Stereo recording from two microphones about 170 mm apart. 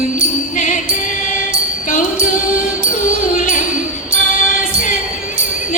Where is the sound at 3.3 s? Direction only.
50° left (ahead or behind).